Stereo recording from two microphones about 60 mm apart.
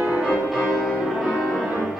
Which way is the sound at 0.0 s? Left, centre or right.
Centre.